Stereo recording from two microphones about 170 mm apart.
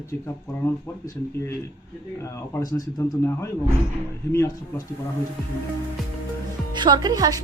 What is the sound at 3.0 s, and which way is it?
Speech, 15° left (ahead or behind).